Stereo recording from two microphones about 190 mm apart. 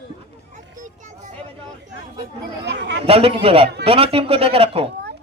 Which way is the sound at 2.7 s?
65° right (ahead or behind).